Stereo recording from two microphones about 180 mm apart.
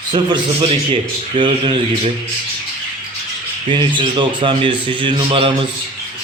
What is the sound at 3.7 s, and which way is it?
A man's voice, 30° right (ahead or behind).